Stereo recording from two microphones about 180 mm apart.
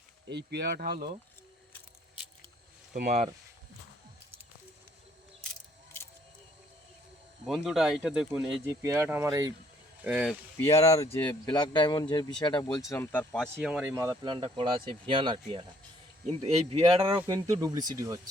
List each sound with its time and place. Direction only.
0.3 s speech: 70° right (ahead or behind); by 1.1 s 55° right (ahead or behind)
2.9 s speech: 45° right (ahead or behind)
7.4 s speech: centre (ahead or behind)
8.6 s speech: 15° right (ahead or behind)
10.0 s speech: 5° right (ahead or behind)
10.8 s speech: 15° left (ahead or behind)
12.9 s speech: 10° left (ahead or behind)
13.6 s speech: 5° right (ahead or behind)
13.9 s speech: 15° right (ahead or behind)